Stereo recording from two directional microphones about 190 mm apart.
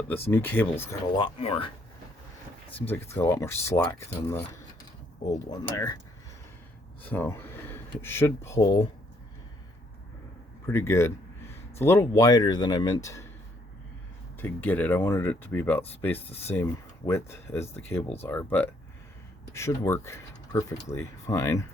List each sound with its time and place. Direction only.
0.3 s speech: 10° left (ahead or behind)
1.1 s speech: 30° left (ahead or behind)
2.8 s speech: 10° left (ahead or behind)
7.0 s speech: 10° left (ahead or behind)
10.7 s speech: 15° left (ahead or behind)
14.3 s speech: 10° left (ahead or behind)